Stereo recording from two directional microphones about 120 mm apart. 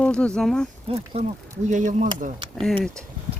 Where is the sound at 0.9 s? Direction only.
60° right (ahead or behind).